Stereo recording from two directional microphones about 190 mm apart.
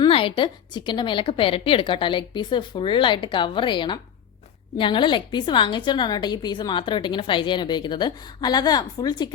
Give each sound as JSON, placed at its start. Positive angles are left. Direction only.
{"t": 0.0, "sound": "a woman's voice", "side_deg": 30}